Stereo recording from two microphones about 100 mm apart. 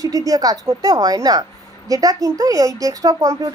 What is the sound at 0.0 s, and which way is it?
Speech, 35° right (ahead or behind).